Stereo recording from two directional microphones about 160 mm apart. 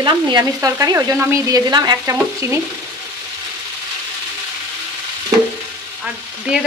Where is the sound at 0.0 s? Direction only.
25° right (ahead or behind).